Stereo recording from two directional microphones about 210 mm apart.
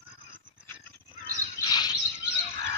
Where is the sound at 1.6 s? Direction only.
20° left (ahead or behind).